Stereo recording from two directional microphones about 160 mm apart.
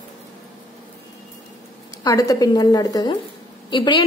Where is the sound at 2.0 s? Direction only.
25° left (ahead or behind).